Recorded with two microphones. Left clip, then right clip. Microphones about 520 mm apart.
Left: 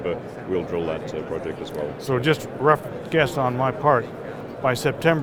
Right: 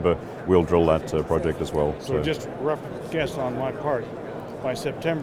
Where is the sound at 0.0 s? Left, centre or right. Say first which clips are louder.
Right 4 dB; right.